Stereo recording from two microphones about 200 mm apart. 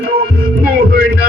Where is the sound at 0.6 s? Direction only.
50° right (ahead or behind).